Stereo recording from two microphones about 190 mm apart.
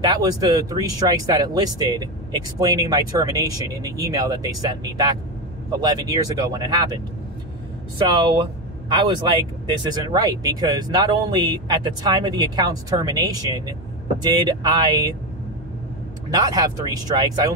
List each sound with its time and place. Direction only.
0.0 s speech: 20° right (ahead or behind)
8.8 s a man's voice: 25° right (ahead or behind)
16.3 s speech: 20° right (ahead or behind)